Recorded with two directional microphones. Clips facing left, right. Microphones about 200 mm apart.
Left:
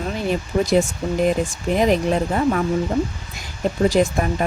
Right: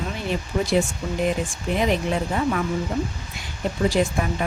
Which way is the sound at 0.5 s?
35° left (ahead or behind).